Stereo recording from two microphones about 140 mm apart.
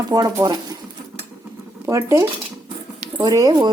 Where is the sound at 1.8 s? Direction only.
20° right (ahead or behind).